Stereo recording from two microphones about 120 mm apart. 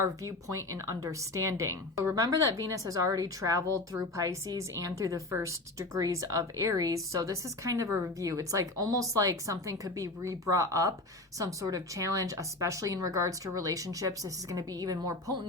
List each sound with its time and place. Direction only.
0.3 s a woman's voice: 25° right (ahead or behind)